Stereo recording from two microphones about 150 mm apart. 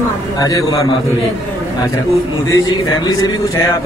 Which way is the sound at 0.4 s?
25° left (ahead or behind).